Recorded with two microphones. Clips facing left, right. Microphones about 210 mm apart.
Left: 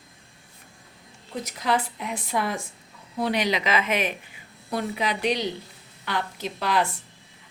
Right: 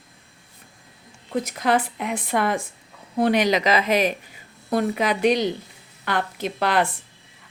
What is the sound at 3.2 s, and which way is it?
Speech, 50° right (ahead or behind).